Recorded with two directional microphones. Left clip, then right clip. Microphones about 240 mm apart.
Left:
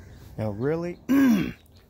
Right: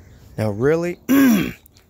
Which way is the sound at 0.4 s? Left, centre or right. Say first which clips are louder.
Right 9 dB; right.